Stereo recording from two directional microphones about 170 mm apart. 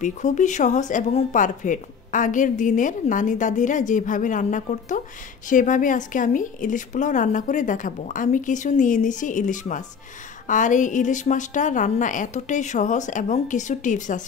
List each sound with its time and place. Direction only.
0.0 s speech: 45° left (ahead or behind)